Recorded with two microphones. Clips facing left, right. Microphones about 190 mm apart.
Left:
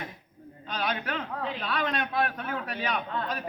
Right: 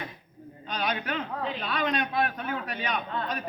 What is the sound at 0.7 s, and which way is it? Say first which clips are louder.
A man's voice: right 1 dB; centre (ahead or behind).